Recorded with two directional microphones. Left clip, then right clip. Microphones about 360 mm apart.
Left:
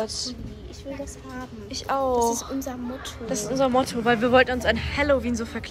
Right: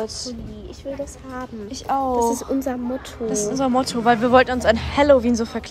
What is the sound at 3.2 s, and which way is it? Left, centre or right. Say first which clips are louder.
Speech: right 2 dB; centre.